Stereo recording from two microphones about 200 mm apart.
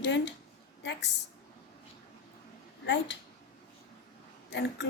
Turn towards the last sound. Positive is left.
turn(degrees=55)  # may be behind; listen again after turning